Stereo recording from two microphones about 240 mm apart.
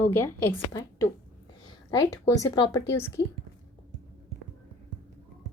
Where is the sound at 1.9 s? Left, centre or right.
Centre.